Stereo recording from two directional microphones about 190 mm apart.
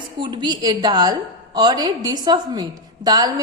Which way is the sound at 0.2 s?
25° right (ahead or behind).